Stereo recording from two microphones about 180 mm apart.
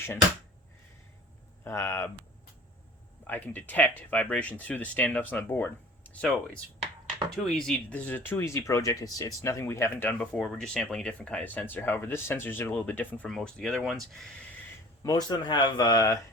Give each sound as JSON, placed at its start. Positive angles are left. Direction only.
{"t": 1.6, "sound": "speech", "side_deg": 15}
{"t": 3.2, "sound": "speech", "side_deg": 10}
{"t": 7.3, "sound": "speech", "side_deg": 0}
{"t": 10.2, "sound": "speech", "side_deg": 0}
{"t": 15.0, "sound": "speech", "side_deg": 20}